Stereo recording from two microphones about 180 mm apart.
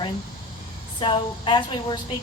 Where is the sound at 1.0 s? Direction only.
25° left (ahead or behind).